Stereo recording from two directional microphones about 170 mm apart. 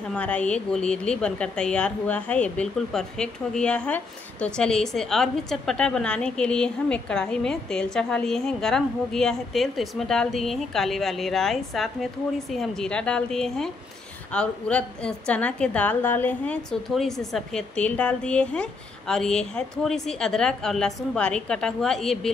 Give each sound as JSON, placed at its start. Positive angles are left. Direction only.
{"t": 0.1, "sound": "a woman's voice", "side_deg": 5}